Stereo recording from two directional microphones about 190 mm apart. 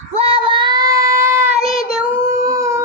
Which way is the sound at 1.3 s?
40° right (ahead or behind).